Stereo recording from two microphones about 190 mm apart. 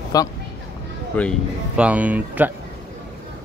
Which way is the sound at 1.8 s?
5° right (ahead or behind).